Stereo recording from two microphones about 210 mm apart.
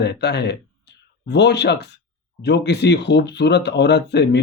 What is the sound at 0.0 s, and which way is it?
Speech, 50° left (ahead or behind).